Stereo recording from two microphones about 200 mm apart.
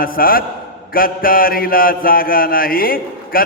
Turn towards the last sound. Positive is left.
turn(degrees=45)  # may be behind; listen again after turning